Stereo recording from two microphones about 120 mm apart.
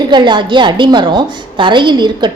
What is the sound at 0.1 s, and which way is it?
A woman's voice, 40° right (ahead or behind).